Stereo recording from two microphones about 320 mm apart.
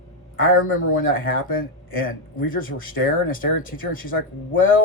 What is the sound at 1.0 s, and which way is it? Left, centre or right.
Speech, left.